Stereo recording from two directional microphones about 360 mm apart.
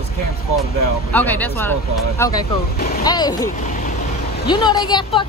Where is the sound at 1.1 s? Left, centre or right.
Centre.